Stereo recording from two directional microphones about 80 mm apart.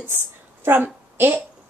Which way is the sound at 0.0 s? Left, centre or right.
Right.